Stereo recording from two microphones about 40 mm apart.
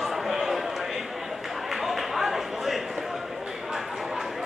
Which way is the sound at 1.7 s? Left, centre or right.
Centre.